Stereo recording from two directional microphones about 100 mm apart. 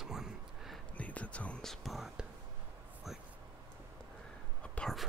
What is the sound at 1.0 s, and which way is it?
Speech, 15° left (ahead or behind).